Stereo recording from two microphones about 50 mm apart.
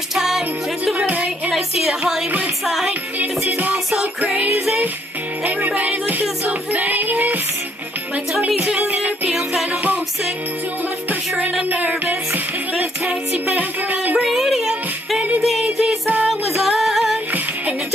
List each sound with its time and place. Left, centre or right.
0.1 s music: centre
1.0 s music: right
1.8 s music: centre
2.9 s music: right
3.7 s music: centre
5.7 s music: right
8.3 s music: centre
8.5 s music: right
11.1 s music: right
13.5 s speech: right
14.2 s music: centre